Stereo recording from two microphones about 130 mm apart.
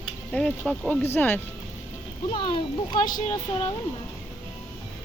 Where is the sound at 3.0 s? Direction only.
90° left.